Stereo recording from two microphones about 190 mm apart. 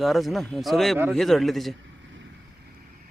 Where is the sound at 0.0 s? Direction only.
Centre (ahead or behind).